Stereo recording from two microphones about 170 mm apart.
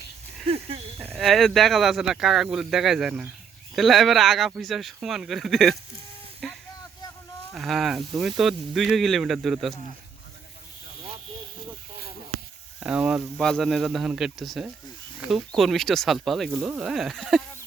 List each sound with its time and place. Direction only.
0.4 s a sound: 35° right (ahead or behind)
1.1 s speech: centre (ahead or behind)
12.8 s speech: 5° right (ahead or behind)